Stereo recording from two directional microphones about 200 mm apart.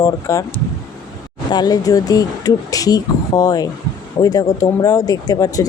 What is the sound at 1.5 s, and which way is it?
Speech, 20° left (ahead or behind).